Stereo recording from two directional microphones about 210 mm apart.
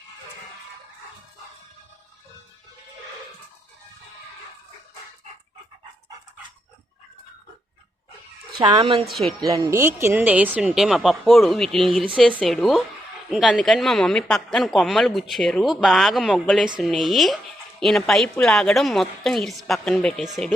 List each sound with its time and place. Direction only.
8.5 s speech: 20° right (ahead or behind)
9.0 s speech: centre (ahead or behind)
9.4 s speech: 15° right (ahead or behind); by 20.5 s centre (ahead or behind)